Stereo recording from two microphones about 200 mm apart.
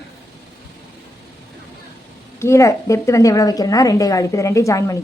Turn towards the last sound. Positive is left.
turn(degrees=15)  # may be behind; listen again after turning